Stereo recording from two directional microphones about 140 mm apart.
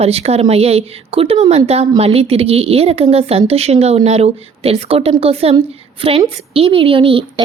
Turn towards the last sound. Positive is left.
turn(degrees=-40)  # may be behind; listen again after turning